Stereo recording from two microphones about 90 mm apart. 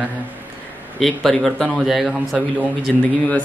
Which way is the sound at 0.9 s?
Centre (ahead or behind).